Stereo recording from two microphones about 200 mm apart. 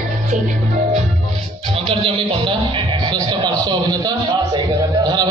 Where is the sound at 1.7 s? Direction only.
25° right (ahead or behind).